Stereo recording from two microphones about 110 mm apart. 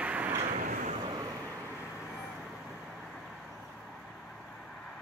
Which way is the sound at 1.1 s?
30° right (ahead or behind).